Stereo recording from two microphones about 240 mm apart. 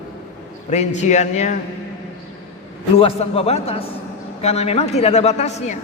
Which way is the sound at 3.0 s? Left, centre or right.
Left.